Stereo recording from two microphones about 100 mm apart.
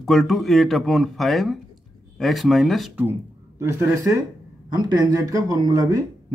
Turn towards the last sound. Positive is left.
turn(degrees=-35)  # may be behind; listen again after turning